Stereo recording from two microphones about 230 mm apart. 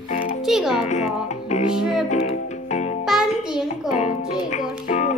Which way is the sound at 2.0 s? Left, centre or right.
Left.